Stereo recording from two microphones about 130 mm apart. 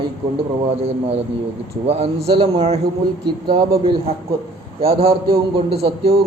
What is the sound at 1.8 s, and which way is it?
Speech, 50° right (ahead or behind).